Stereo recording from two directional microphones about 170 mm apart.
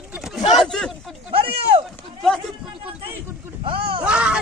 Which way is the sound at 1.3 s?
35° right (ahead or behind).